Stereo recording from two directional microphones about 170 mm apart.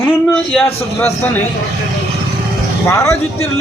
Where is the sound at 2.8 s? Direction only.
15° left (ahead or behind).